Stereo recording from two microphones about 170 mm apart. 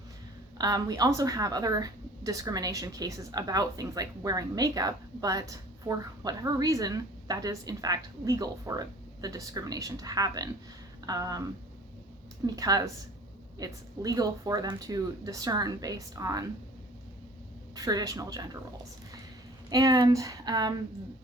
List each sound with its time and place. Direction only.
0.6 s speech: 20° right (ahead or behind)
12.5 s speech: 20° right (ahead or behind)
17.7 s speech: 20° right (ahead or behind)
19.7 s speech: 20° right (ahead or behind)